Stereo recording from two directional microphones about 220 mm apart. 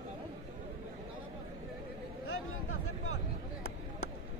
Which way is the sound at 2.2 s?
75° left (ahead or behind).